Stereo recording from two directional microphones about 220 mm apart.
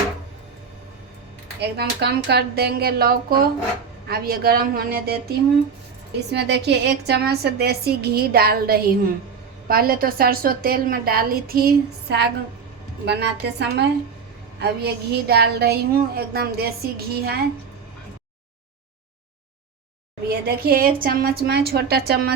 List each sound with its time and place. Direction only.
1.7 s a woman's voice: 45° right (ahead or behind)
6.3 s a woman's voice: 50° right (ahead or behind)
20.2 s a woman's voice: 45° right (ahead or behind)